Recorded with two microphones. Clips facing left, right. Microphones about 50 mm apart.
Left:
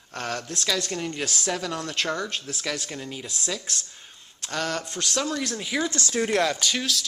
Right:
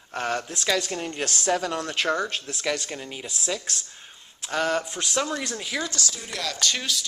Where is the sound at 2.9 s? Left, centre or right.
Centre.